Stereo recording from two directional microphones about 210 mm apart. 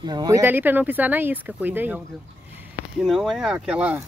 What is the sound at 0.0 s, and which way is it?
Speech, 20° right (ahead or behind).